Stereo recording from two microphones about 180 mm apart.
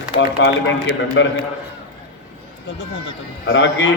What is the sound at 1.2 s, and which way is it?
Speech, 90° left.